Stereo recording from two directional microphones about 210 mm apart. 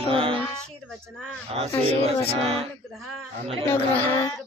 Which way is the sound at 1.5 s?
30° right (ahead or behind).